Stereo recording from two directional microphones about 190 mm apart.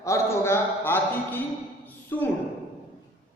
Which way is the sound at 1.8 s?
10° left (ahead or behind).